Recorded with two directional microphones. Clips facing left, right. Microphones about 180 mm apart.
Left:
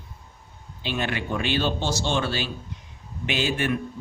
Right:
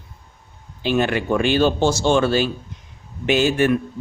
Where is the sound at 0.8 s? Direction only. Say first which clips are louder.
Right 9 dB; 45° right (ahead or behind).